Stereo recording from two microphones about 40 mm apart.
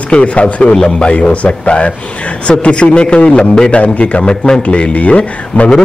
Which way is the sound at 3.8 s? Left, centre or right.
Left.